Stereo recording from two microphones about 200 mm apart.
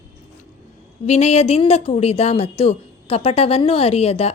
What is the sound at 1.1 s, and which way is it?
Speech, 35° left (ahead or behind).